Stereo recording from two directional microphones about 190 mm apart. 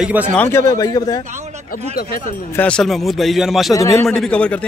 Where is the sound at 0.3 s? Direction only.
10° left (ahead or behind).